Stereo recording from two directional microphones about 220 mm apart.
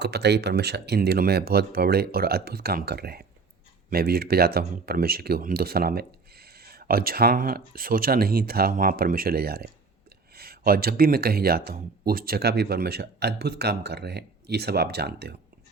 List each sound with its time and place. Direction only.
0.0 s speech: 50° right (ahead or behind)